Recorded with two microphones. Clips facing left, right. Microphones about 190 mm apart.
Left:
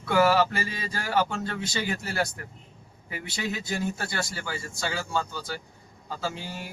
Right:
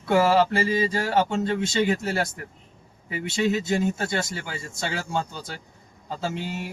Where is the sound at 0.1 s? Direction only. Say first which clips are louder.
Right 2 dB; 25° right (ahead or behind).